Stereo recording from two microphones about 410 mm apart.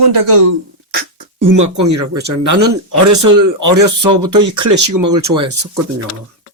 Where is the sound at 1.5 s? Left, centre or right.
Right.